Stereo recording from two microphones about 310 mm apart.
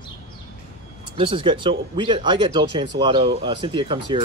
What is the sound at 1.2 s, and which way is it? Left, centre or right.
Speech, centre.